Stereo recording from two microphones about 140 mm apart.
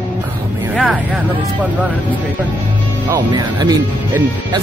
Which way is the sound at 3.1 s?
25° right (ahead or behind).